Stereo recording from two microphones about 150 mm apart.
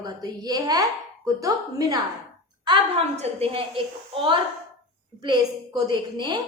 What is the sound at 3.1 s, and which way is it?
A woman's voice, 40° right (ahead or behind).